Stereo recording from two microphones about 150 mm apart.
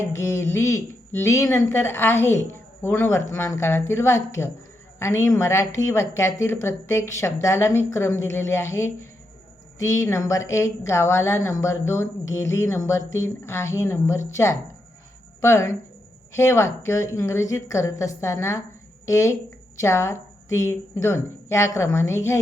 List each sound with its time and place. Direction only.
0.2 s a woman's voice: 20° left (ahead or behind)
15.4 s a woman's voice: 15° left (ahead or behind)